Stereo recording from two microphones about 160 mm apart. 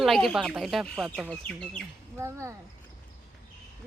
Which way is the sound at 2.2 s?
15° right (ahead or behind).